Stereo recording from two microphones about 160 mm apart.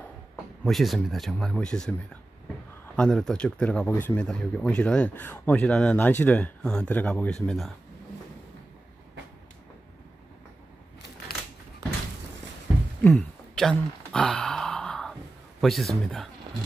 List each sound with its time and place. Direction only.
0.7 s speech: centre (ahead or behind)
3.0 s speech: 5° left (ahead or behind)
13.0 s a sound: 5° left (ahead or behind)
15.6 s speech: centre (ahead or behind)